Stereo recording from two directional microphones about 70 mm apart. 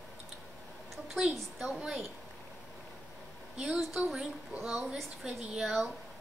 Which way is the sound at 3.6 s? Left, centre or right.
Centre.